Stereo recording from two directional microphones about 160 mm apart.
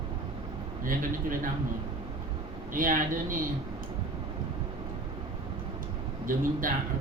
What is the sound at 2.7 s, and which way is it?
Speech, 60° right (ahead or behind).